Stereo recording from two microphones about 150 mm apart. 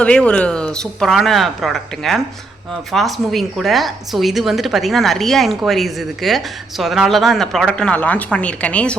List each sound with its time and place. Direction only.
0.0 s a woman's voice: 5° left (ahead or behind)